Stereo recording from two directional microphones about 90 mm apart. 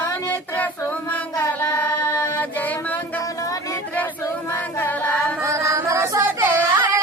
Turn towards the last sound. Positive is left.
turn(degrees=-25)  # may be behind; listen again after turning